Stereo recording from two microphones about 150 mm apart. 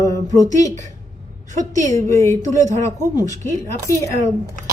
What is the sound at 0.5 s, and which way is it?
A woman's voice, 20° left (ahead or behind).